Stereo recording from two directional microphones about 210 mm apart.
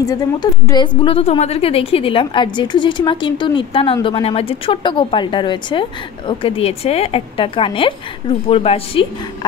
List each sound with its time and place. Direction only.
0.0 s speech: 15° left (ahead or behind)